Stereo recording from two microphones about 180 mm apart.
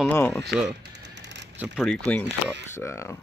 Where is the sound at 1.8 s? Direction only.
5° left (ahead or behind).